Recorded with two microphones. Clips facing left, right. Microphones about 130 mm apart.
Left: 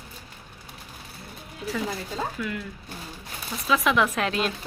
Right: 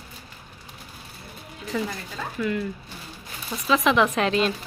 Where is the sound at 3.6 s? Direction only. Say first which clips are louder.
Right 2 dB; centre (ahead or behind).